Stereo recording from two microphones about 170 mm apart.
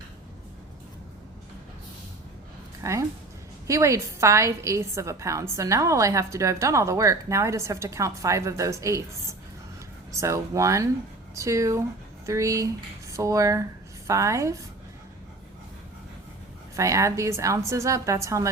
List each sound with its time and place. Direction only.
2.8 s a woman's voice: 20° right (ahead or behind)
10.2 s a woman's voice: 15° right (ahead or behind)
16.7 s a woman's voice: 20° right (ahead or behind)